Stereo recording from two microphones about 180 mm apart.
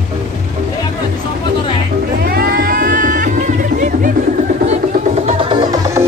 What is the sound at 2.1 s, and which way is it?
Music, 55° right (ahead or behind).